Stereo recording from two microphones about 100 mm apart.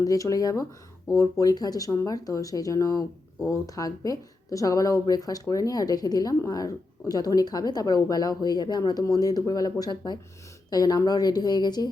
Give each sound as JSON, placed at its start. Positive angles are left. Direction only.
{"t": 0.0, "sound": "a woman's voice", "side_deg": 35}